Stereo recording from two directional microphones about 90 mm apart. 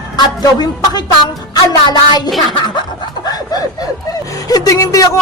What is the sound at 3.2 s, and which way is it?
Chuckle, 45° left (ahead or behind).